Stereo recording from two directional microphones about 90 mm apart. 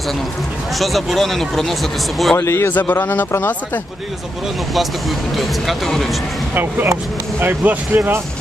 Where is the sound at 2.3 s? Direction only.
30° left (ahead or behind).